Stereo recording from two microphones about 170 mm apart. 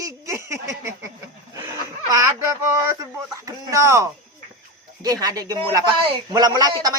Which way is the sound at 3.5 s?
20° right (ahead or behind).